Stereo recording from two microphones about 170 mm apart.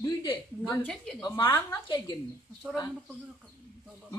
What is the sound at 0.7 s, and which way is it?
A woman's voice, 5° left (ahead or behind).